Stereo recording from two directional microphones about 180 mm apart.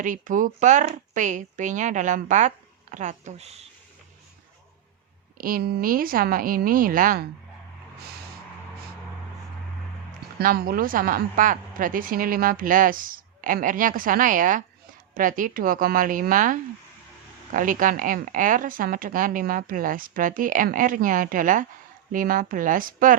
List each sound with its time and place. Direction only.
0.0 s a woman's voice: 45° right (ahead or behind)
5.4 s a woman's voice: 55° right (ahead or behind)
10.3 s a woman's voice: 55° right (ahead or behind)